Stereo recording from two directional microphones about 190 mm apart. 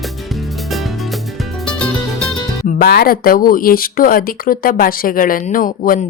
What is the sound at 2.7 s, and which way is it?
Speech, 55° left (ahead or behind).